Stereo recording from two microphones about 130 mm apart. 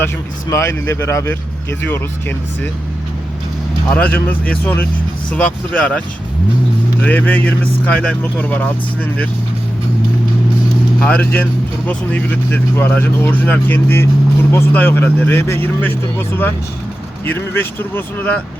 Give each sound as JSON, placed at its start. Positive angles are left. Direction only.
{"t": 0.5, "sound": "speech", "side_deg": 25}
{"t": 3.9, "sound": "speech", "side_deg": 15}
{"t": 7.0, "sound": "speech", "side_deg": 15}
{"t": 11.0, "sound": "speech", "side_deg": 10}